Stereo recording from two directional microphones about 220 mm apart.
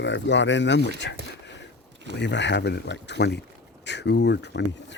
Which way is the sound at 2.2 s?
55° left (ahead or behind).